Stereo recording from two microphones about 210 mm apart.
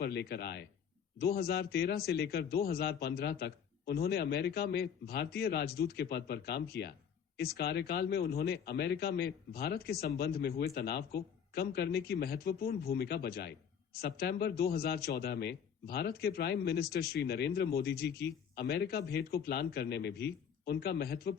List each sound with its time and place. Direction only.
0.0 s a man's voice: 50° left (ahead or behind)